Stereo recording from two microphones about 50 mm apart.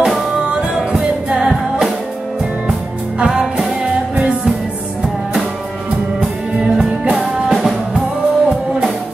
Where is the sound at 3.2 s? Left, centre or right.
Centre.